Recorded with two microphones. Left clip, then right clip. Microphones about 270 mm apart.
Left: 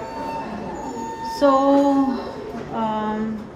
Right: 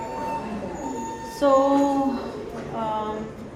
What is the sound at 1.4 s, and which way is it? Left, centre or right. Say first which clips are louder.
Music: left 2 dB; left.